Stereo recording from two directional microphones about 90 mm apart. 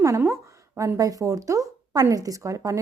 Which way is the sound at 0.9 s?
40° right (ahead or behind).